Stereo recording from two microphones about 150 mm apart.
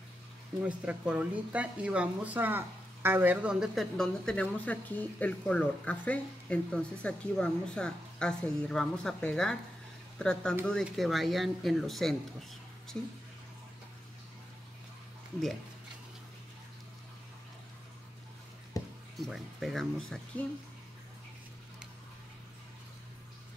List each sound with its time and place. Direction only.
0.7 s speech: 10° right (ahead or behind)
18.8 s music: 25° left (ahead or behind)
19.1 s speech: centre (ahead or behind)